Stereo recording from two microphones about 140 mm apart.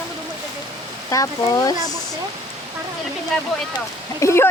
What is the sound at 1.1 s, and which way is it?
Speech, 25° left (ahead or behind).